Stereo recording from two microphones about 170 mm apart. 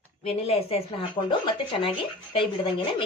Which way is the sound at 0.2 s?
35° left (ahead or behind).